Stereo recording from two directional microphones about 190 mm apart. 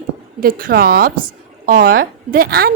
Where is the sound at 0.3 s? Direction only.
50° right (ahead or behind).